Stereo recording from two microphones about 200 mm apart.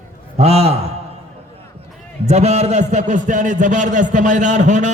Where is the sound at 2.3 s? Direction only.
35° right (ahead or behind).